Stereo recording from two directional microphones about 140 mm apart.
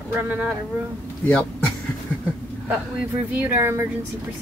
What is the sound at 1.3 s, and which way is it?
Speech, 10° left (ahead or behind).